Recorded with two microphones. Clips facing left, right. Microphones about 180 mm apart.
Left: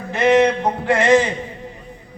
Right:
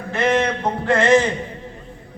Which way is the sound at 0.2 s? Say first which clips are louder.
Left 5 dB; 15° left (ahead or behind).